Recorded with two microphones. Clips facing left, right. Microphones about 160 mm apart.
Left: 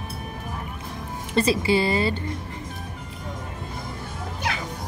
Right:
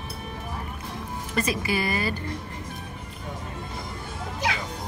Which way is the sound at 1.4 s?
30° left (ahead or behind).